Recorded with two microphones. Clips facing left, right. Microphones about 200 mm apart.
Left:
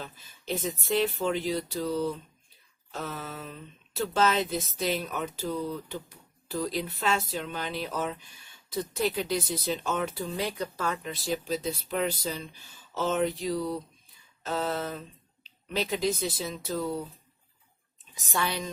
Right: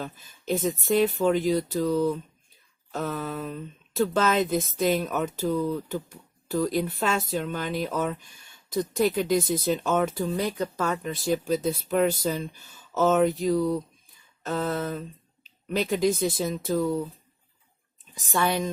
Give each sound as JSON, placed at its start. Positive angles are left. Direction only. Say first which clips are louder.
{"t": 0.0, "sound": "speech", "louder": "right 6 dB", "side_deg": -45}
{"t": 18.1, "sound": "speech", "louder": "right 6 dB", "side_deg": -50}